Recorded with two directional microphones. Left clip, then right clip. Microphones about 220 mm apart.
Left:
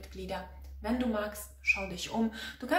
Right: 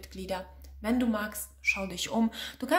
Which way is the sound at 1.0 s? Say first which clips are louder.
Even; 50° right (ahead or behind).